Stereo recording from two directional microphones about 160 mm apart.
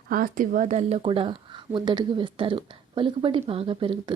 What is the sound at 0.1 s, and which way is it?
Speech, 60° right (ahead or behind).